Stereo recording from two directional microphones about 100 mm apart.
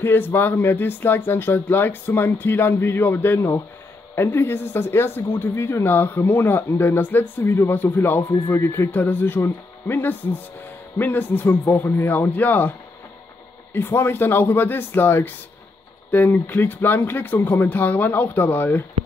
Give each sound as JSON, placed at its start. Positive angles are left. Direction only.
{"t": 0.0, "sound": "speech", "side_deg": 20}
{"t": 13.7, "sound": "speech", "side_deg": 25}